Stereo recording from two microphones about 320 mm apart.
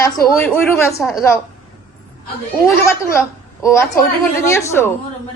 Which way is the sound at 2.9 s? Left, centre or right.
Centre.